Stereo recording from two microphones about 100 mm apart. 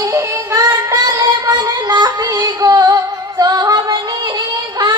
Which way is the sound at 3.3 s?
40° right (ahead or behind).